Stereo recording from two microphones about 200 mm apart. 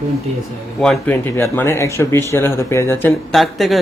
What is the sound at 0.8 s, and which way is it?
Speech, 5° left (ahead or behind).